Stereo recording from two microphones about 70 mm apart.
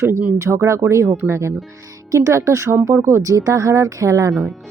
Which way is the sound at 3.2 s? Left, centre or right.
Right.